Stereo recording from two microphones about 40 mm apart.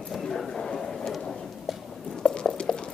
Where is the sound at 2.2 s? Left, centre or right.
Centre.